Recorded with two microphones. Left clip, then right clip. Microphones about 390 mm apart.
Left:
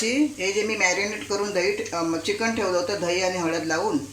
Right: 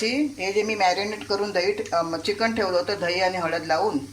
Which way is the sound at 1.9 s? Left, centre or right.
Right.